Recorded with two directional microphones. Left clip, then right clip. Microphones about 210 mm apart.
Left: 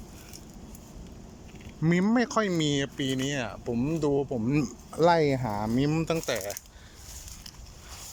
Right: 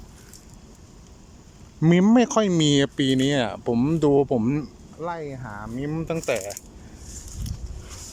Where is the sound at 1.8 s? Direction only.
15° right (ahead or behind).